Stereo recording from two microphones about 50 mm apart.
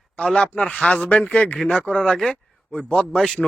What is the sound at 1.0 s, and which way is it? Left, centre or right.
Speech, left.